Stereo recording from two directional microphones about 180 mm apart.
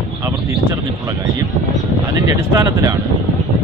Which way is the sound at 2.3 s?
20° right (ahead or behind).